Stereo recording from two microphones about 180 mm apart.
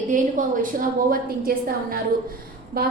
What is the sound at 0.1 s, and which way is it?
A woman's voice, 45° right (ahead or behind).